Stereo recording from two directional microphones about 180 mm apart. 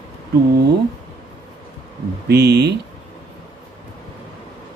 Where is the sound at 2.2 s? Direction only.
65° right (ahead or behind).